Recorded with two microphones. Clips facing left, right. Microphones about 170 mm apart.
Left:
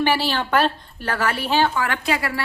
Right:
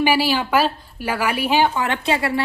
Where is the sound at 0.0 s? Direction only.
10° right (ahead or behind).